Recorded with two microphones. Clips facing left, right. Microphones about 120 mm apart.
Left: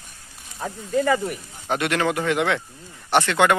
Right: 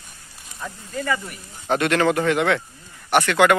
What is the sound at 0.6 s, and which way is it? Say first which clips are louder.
Speech: left 7 dB; 45° left (ahead or behind).